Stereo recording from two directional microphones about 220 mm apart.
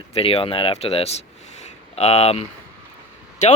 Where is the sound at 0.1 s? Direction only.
25° left (ahead or behind).